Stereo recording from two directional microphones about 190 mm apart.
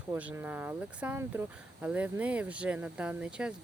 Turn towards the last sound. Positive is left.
turn(degrees=-5)  # may be behind; listen again after turning